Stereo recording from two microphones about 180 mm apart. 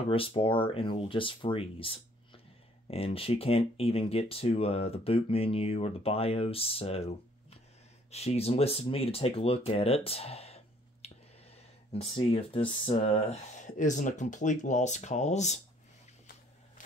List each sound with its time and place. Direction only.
0.1 s speech: 30° left (ahead or behind)
8.1 s speech: 35° left (ahead or behind)